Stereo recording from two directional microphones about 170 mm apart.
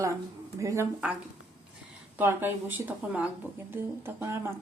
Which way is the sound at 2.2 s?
10° right (ahead or behind).